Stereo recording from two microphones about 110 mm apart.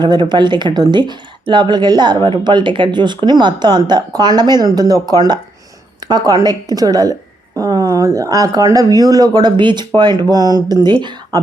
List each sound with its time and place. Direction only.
0.0 s a woman's voice: 40° right (ahead or behind)